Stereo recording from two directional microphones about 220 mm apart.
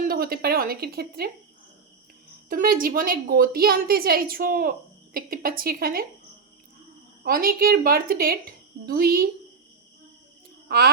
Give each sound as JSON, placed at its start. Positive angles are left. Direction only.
{"t": 0.0, "sound": "speech", "side_deg": -45}
{"t": 2.5, "sound": "a woman's voice", "side_deg": -40}
{"t": 7.3, "sound": "speech", "side_deg": -40}
{"t": 10.7, "sound": "speech", "side_deg": -45}